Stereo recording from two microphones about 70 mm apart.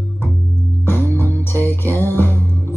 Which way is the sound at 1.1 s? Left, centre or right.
Left.